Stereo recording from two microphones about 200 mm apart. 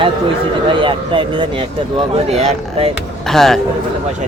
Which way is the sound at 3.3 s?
Centre (ahead or behind).